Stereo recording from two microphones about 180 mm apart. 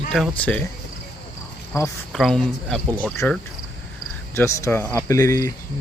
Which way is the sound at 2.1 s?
Centre (ahead or behind).